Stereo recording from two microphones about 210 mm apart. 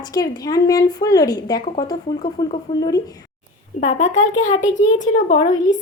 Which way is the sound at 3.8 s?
35° left (ahead or behind).